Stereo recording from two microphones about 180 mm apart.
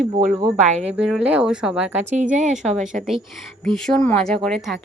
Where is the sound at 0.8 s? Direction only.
5° right (ahead or behind).